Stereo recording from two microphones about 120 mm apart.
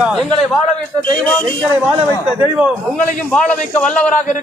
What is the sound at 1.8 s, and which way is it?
Speech, 10° right (ahead or behind).